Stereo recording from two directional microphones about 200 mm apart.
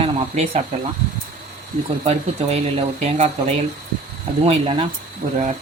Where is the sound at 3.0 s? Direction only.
35° right (ahead or behind).